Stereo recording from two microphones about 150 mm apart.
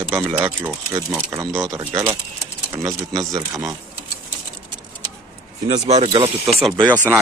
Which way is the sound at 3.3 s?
20° right (ahead or behind).